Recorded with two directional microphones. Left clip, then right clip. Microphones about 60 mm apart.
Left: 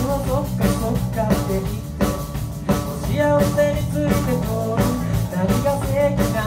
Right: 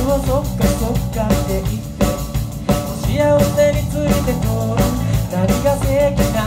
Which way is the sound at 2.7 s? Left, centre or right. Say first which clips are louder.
Right 3 dB; right.